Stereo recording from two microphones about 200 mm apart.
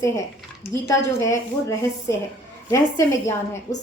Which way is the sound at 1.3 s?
15° left (ahead or behind).